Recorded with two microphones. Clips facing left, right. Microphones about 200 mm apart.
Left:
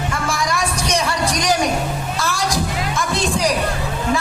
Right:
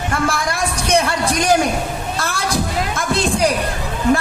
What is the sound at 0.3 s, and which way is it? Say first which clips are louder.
Music: right 1 dB; 55° right (ahead or behind).